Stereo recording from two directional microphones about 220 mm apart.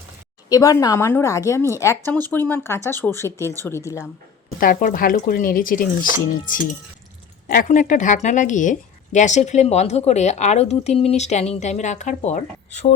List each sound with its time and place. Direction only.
0.5 s a woman's voice: 15° left (ahead or behind)
4.6 s a woman's voice: 40° left (ahead or behind)
7.4 s a woman's voice: 40° left (ahead or behind)